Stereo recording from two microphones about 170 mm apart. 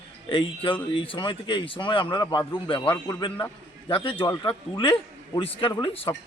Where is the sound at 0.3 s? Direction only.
30° left (ahead or behind).